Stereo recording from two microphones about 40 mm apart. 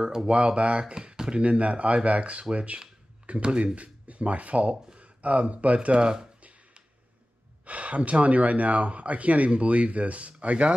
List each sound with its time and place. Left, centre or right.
0.0 s speech: centre
1.4 s speech: right
7.6 s speech: right